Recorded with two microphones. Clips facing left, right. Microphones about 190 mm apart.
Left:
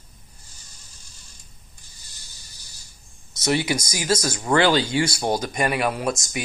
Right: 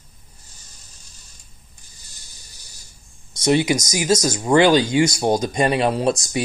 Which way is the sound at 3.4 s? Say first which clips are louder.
Right 5 dB; 20° right (ahead or behind).